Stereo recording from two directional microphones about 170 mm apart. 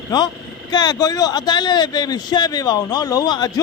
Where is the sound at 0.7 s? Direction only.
25° left (ahead or behind).